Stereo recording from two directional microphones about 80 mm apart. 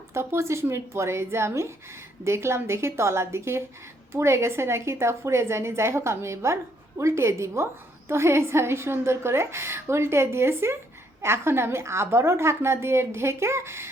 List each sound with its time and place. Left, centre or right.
0.1 s a woman's voice: right